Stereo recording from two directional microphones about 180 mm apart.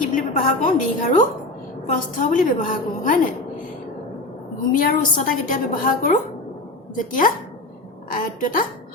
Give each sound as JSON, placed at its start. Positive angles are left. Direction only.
{"t": 0.1, "sound": "a woman's voice", "side_deg": 45}
{"t": 4.7, "sound": "a woman's voice", "side_deg": 50}